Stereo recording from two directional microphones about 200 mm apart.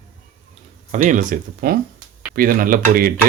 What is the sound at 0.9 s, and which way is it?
A man's voice, 40° right (ahead or behind).